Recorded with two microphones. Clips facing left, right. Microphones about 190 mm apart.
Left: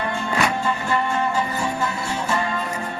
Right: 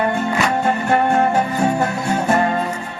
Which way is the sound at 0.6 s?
60° right (ahead or behind).